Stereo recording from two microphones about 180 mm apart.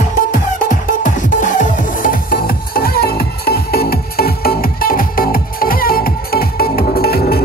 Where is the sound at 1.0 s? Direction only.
45° left (ahead or behind).